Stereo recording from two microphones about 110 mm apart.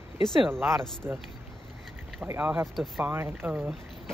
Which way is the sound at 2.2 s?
15° right (ahead or behind).